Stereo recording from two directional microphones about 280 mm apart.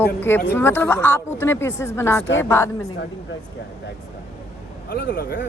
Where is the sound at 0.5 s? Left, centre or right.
Centre.